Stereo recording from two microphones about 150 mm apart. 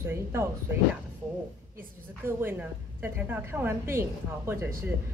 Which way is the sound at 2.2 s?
15° right (ahead or behind).